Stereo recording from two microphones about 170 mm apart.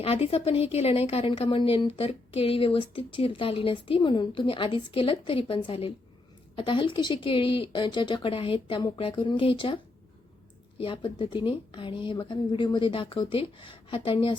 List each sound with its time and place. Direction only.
0.0 s a woman's voice: 35° left (ahead or behind)
10.8 s a woman's voice: 30° left (ahead or behind)